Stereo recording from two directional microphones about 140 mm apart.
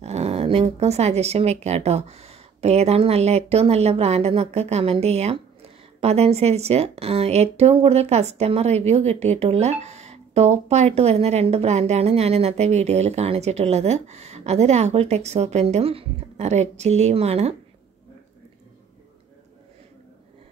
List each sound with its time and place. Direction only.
0.0 s speech: 50° right (ahead or behind)